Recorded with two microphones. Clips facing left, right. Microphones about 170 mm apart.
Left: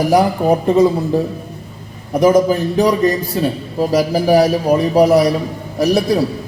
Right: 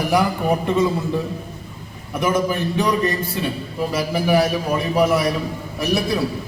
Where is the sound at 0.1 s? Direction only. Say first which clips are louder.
Left 4 dB; 35° left (ahead or behind).